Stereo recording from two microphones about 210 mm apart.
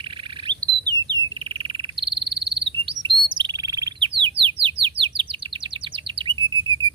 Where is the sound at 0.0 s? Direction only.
25° right (ahead or behind).